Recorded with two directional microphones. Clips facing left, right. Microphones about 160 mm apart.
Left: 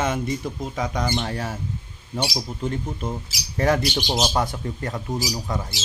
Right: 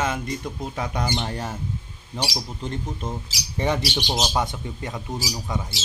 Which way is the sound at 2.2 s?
Centre (ahead or behind).